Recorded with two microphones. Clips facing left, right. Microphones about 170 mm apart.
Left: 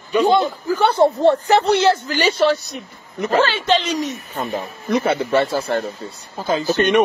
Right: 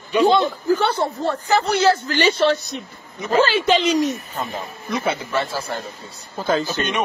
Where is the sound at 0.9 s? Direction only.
20° left (ahead or behind).